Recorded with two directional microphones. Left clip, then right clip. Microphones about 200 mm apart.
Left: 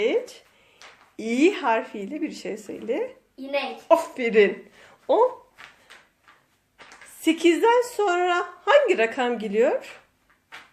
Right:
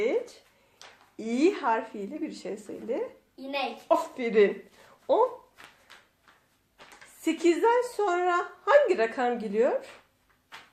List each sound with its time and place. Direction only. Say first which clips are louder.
0.0 s speech: left 4 dB; 25° left (ahead or behind)
7.3 s speech: left 5 dB; 30° left (ahead or behind)